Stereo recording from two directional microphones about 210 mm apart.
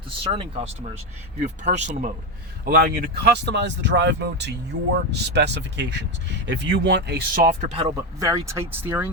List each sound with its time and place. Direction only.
0.1 s speech: 25° right (ahead or behind); by 7.7 s 40° right (ahead or behind)
7.7 s speech: 20° right (ahead or behind)